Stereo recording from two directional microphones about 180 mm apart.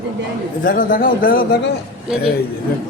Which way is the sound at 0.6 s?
50° left (ahead or behind).